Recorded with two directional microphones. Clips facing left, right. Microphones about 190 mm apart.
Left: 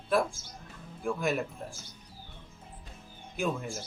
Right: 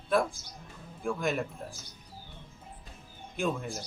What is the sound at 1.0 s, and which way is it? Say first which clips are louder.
Speech: even; centre (ahead or behind).